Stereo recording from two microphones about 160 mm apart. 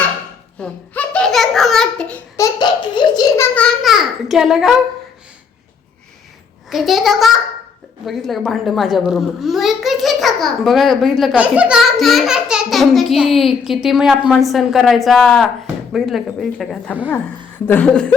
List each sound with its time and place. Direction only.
0.6 s a child's voice: 5° left (ahead or behind)
2.3 s laughter: 25° left (ahead or behind)
3.3 s a sound: 10° left (ahead or behind)
3.8 s a child's voice: centre (ahead or behind)
6.7 s a child's voice: centre (ahead or behind)
17.7 s chuckle: 10° left (ahead or behind)